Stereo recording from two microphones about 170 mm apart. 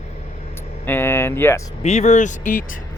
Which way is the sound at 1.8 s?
40° left (ahead or behind).